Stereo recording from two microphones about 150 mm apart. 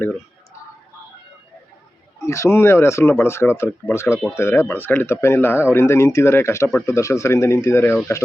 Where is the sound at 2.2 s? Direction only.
20° left (ahead or behind).